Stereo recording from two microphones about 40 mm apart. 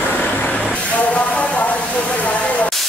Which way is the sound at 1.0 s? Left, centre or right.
Left.